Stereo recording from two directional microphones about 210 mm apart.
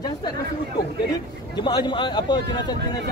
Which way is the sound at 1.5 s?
20° left (ahead or behind).